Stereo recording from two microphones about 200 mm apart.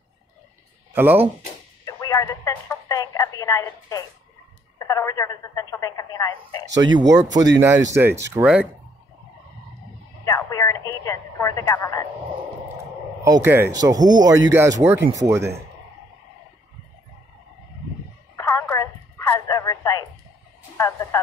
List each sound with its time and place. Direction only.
0.9 s speech: 10° right (ahead or behind)
1.9 s radio: 15° left (ahead or behind)
4.7 s speech: 15° left (ahead or behind)
6.7 s speech: 20° right (ahead or behind)
10.2 s radio: 15° left (ahead or behind)
10.9 s speech: 15° left (ahead or behind)
13.2 s speech: 15° right (ahead or behind)
18.5 s telephone: 15° left (ahead or behind)
20.7 s speech: 15° left (ahead or behind)